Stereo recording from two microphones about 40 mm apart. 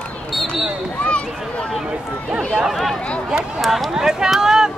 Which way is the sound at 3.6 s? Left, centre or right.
Centre.